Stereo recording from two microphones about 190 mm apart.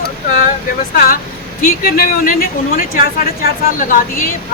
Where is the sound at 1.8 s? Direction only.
50° left (ahead or behind).